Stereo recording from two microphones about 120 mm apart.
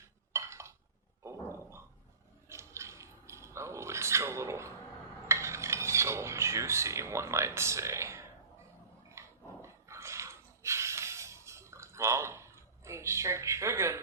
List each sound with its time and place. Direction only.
0.3 s dishes: 25° right (ahead or behind)
1.2 s a sound: 25° right (ahead or behind)
5.3 s cutlery: 25° right (ahead or behind)
9.0 s dog: 25° right (ahead or behind)